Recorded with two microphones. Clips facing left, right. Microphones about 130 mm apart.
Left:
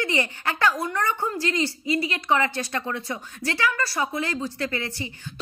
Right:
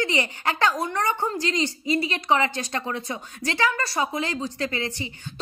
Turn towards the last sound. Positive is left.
turn(degrees=-20)  # may be behind; listen again after turning